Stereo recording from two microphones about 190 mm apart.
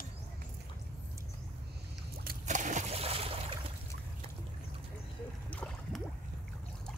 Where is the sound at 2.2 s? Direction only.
45° right (ahead or behind); by 3.6 s 30° right (ahead or behind).